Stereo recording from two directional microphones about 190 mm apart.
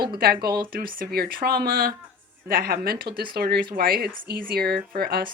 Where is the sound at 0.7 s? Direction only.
50° right (ahead or behind).